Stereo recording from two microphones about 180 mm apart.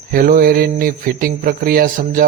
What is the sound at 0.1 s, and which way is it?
A man's voice, 55° right (ahead or behind).